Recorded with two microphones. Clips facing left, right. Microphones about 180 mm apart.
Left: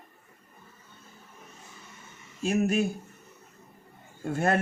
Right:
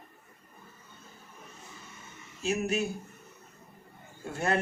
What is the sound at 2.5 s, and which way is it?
Speech, 55° left (ahead or behind).